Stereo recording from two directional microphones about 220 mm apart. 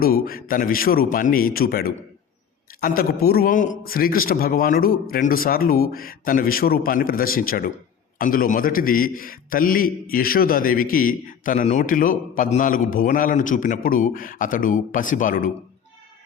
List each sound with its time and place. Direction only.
0.0 s a man's voice: 40° left (ahead or behind)